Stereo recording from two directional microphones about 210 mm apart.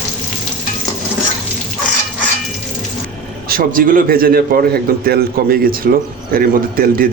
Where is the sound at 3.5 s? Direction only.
40° right (ahead or behind).